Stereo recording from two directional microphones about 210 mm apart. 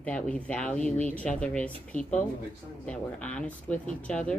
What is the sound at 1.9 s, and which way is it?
Speech, 35° left (ahead or behind).